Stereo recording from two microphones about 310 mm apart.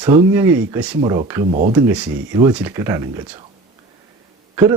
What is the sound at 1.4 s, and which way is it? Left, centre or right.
Speech, right.